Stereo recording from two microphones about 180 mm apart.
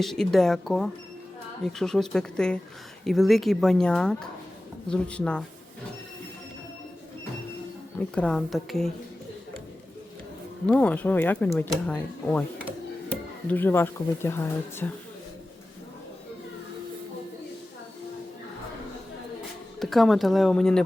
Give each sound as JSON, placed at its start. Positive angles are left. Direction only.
{"t": 0.0, "sound": "speech", "side_deg": 0}
{"t": 7.9, "sound": "speech", "side_deg": 5}
{"t": 10.7, "sound": "speech", "side_deg": 10}
{"t": 13.5, "sound": "speech", "side_deg": 10}
{"t": 19.8, "sound": "speech", "side_deg": 0}